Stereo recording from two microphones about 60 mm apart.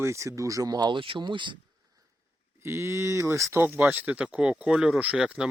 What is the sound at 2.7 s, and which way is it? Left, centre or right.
Speech, right.